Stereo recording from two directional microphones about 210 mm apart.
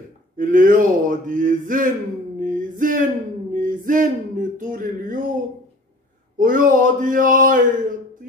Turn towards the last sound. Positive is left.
turn(degrees=-40)  # may be behind; listen again after turning